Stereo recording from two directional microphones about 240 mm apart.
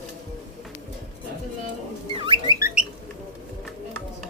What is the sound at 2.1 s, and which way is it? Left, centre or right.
Bird, right.